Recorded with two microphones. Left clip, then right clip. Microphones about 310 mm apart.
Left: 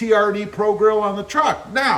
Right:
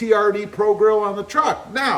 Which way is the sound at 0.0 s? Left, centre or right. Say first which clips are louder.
Even; centre.